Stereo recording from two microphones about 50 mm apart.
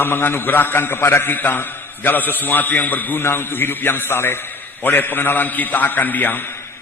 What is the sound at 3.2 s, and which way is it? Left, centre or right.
A man's voice, left.